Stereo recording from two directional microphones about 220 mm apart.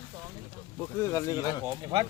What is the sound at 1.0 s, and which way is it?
Speech, 15° left (ahead or behind).